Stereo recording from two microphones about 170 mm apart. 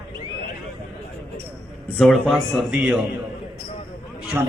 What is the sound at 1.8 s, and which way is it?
Speech, 5° left (ahead or behind).